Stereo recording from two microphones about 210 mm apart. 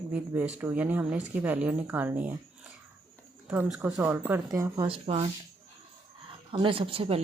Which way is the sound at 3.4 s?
5° right (ahead or behind).